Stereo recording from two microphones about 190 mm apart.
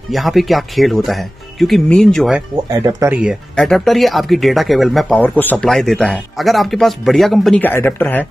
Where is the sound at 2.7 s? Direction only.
20° right (ahead or behind).